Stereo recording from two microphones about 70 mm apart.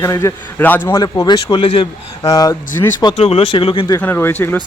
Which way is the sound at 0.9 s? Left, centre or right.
Left.